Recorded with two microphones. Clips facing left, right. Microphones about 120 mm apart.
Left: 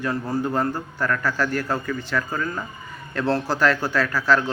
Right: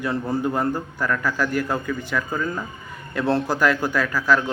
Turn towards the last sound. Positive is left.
turn(degrees=-15)  # may be behind; listen again after turning